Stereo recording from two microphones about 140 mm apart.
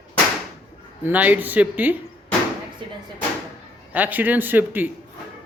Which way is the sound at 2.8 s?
35° right (ahead or behind).